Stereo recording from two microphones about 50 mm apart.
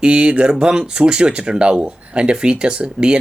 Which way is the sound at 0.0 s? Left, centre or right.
Centre.